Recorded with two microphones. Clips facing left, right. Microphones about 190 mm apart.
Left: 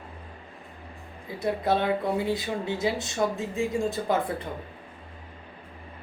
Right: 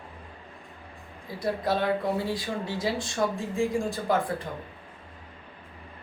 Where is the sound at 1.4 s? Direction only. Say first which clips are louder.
Left 2 dB; 20° left (ahead or behind).